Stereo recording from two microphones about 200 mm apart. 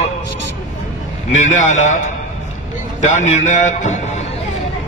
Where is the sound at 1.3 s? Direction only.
35° left (ahead or behind).